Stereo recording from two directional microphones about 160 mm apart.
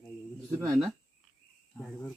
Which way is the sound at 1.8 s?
10° left (ahead or behind).